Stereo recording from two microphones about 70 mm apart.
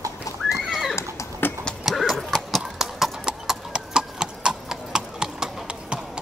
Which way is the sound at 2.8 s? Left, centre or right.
Centre.